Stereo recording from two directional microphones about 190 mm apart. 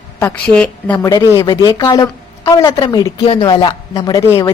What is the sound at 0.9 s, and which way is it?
A woman's voice, 20° left (ahead or behind).